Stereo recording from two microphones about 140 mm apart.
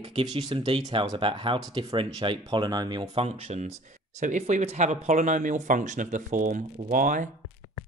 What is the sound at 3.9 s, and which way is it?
Speech, 60° right (ahead or behind).